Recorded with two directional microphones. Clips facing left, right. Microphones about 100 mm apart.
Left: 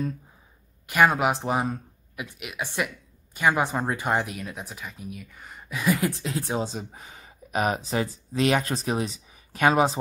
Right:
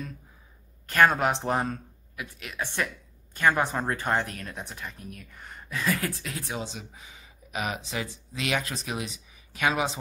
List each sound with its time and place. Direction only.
0.8 s speech: 10° left (ahead or behind); by 9.9 s 40° left (ahead or behind)